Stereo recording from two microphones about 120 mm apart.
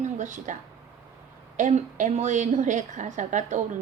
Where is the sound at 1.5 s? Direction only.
90° right.